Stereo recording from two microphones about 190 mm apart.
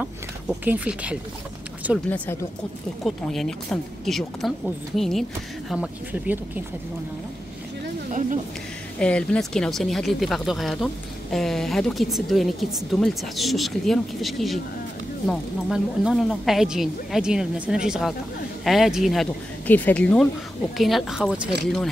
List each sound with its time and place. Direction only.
0.0 s speech: 5° right (ahead or behind)
2.0 s a woman's voice: 10° left (ahead or behind); by 6.6 s 10° right (ahead or behind)
9.0 s a woman's voice: 5° left (ahead or behind)